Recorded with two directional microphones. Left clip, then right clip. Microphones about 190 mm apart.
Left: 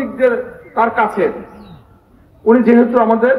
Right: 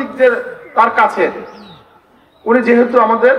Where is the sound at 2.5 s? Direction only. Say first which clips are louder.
Even; 40° left (ahead or behind).